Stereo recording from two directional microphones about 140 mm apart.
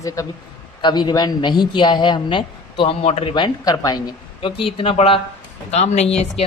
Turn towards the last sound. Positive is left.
turn(degrees=50)  # may be behind; listen again after turning